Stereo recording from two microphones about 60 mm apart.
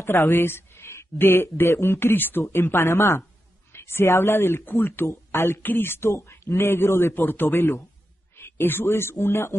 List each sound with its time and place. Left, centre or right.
0.0 s speech: left
2.5 s a man's voice: left
3.7 s a sound: left
4.1 s speech: left
4.4 s speech: left
5.0 s speech: left
5.6 s speech: left
6.1 s a man's voice: left
8.4 s a sound: left
8.8 s a man's voice: left